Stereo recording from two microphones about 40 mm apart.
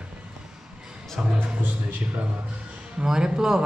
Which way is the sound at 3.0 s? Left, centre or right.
Centre.